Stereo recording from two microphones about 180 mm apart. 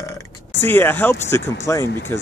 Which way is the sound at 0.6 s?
10° left (ahead or behind).